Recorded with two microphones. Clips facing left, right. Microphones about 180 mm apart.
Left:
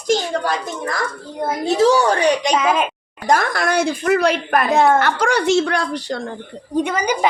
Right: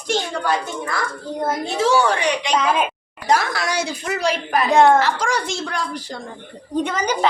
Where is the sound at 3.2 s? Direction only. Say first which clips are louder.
Left 2 dB; 50° left (ahead or behind).